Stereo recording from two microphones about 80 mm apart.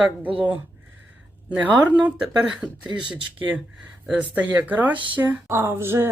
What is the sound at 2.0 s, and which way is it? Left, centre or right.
A woman's voice, centre.